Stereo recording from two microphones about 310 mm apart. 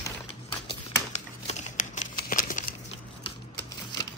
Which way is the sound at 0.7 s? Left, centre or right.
Left.